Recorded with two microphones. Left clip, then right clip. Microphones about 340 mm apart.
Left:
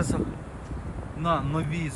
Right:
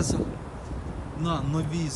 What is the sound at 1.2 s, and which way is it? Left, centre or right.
Speech, centre.